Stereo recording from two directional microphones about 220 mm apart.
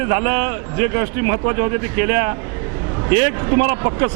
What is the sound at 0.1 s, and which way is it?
A man's voice, 15° right (ahead or behind).